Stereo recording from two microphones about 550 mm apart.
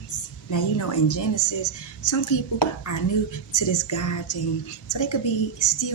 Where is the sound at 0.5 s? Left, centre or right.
Left.